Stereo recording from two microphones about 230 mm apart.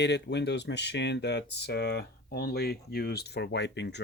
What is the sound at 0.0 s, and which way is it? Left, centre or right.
Speech, left.